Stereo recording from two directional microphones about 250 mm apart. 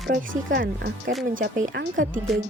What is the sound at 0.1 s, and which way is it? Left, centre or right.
Speech, right.